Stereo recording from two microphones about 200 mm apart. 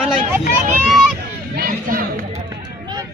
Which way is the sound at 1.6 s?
45° right (ahead or behind).